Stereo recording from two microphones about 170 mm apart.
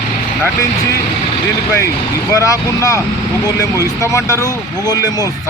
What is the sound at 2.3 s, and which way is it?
Speech, 20° left (ahead or behind).